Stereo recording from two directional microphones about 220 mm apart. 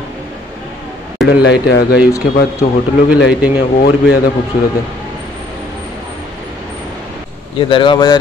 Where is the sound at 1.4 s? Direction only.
45° left (ahead or behind).